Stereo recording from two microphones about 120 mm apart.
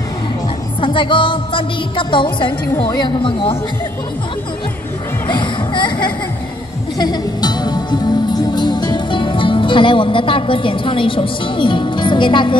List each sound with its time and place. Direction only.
0.7 s music: 45° left (ahead or behind)
5.3 s a sound: 40° left (ahead or behind)
7.0 s music: 35° left (ahead or behind)